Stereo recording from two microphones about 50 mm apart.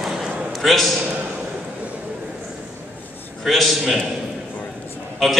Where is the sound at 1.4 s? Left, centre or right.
Right.